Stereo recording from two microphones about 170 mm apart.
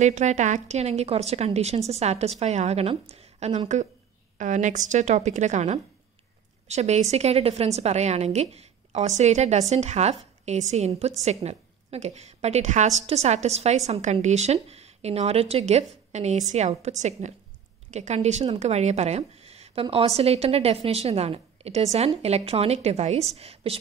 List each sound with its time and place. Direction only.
0.0 s a woman's voice: 45° right (ahead or behind)